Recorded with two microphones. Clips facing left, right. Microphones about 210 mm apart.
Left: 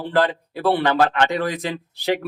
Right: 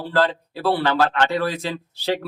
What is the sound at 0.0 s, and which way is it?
Speech, 15° left (ahead or behind).